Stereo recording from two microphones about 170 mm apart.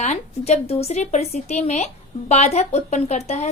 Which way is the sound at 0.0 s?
45° left (ahead or behind).